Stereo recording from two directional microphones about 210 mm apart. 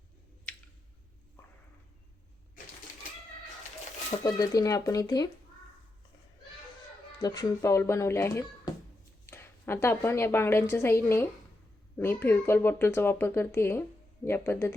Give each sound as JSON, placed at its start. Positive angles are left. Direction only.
{"t": 4.2, "sound": "speech", "side_deg": 20}
{"t": 7.2, "sound": "a woman's voice", "side_deg": 20}